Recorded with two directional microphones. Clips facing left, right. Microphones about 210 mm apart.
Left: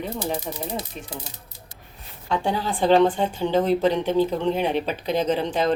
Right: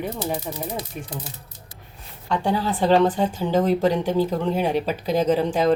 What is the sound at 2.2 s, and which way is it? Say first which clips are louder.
Speech: right 1 dB; 5° left (ahead or behind).